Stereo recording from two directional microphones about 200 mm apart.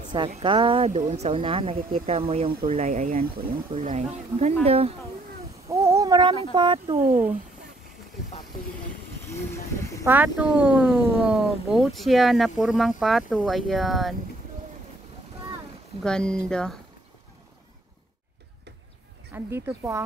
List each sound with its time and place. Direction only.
0.4 s speech: 25° right (ahead or behind)
5.7 s a sound: 15° right (ahead or behind)
6.5 s speech: 25° right (ahead or behind)
7.0 s speech: 45° right (ahead or behind)
9.3 s speech: 15° left (ahead or behind)
10.0 s speech: 10° right (ahead or behind)
16.0 s speech: 5° left (ahead or behind)
19.3 s speech: 15° right (ahead or behind)